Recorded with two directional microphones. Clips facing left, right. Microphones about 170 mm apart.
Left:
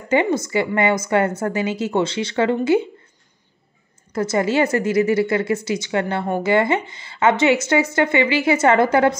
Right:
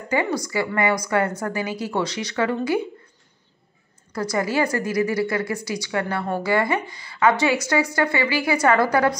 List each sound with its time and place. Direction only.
0.1 s a woman's voice: 25° left (ahead or behind)
4.1 s a woman's voice: 25° left (ahead or behind)